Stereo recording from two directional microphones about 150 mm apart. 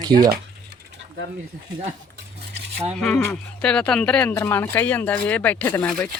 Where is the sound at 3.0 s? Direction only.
5° left (ahead or behind).